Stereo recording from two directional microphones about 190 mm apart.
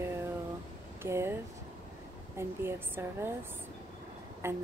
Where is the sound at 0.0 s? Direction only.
15° right (ahead or behind).